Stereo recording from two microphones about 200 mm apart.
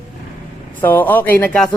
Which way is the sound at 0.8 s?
10° left (ahead or behind).